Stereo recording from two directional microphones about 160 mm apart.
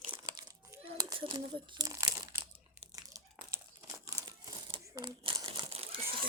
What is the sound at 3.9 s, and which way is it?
Crumpling, 20° right (ahead or behind).